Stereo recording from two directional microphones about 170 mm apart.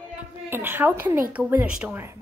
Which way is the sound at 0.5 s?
10° right (ahead or behind).